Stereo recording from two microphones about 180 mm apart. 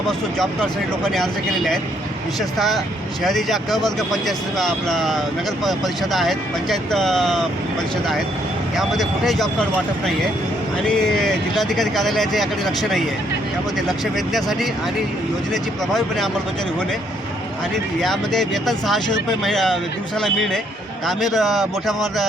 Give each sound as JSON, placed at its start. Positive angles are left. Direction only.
{"t": 0.3, "sound": "speech", "side_deg": 5}
{"t": 8.8, "sound": "speech", "side_deg": 0}
{"t": 10.8, "sound": "speech", "side_deg": 5}
{"t": 15.9, "sound": "speech", "side_deg": 0}
{"t": 18.0, "sound": "speech", "side_deg": 0}